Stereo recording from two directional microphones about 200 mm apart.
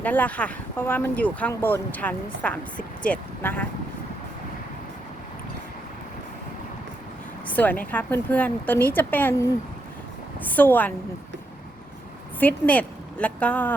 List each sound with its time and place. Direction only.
0.0 s speech: 5° left (ahead or behind)
7.4 s speech: 10° left (ahead or behind)
12.4 s a woman's voice: 10° left (ahead or behind)